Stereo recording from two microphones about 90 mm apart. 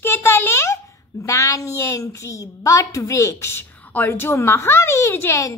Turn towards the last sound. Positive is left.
turn(degrees=35)  # may be behind; listen again after turning